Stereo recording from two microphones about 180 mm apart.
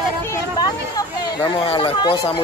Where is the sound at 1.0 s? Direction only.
25° left (ahead or behind).